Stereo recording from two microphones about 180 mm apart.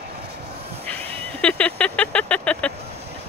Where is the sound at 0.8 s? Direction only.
10° left (ahead or behind).